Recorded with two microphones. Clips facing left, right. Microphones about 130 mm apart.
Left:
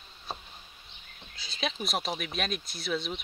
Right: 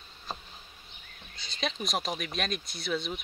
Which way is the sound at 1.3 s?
Centre (ahead or behind).